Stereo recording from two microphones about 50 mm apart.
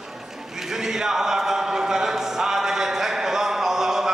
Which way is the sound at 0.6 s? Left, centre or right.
Centre.